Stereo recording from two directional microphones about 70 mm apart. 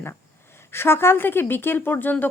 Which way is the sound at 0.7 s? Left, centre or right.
Left.